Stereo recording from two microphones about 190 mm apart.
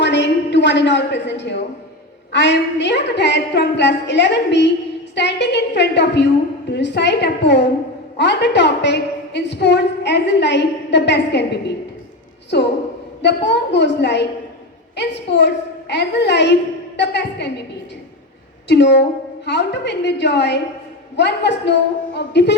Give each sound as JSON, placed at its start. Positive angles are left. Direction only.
{"t": 0.0, "sound": "a sound", "side_deg": 70}
{"t": 2.3, "sound": "a woman's voice", "side_deg": 70}
{"t": 12.5, "sound": "a woman's voice", "side_deg": 65}
{"t": 18.7, "sound": "a woman's voice", "side_deg": 65}